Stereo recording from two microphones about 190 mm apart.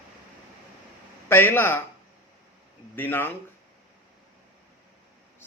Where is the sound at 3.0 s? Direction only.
10° left (ahead or behind).